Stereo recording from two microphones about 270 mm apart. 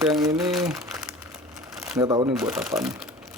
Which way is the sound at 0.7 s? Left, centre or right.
Centre.